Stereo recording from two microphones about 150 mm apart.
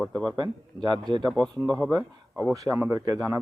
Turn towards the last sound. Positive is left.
turn(degrees=-20)  # may be behind; listen again after turning